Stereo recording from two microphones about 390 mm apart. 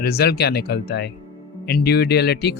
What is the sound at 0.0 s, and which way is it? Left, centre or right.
Speech, left.